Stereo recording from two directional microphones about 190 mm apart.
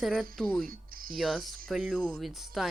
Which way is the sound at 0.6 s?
50° right (ahead or behind).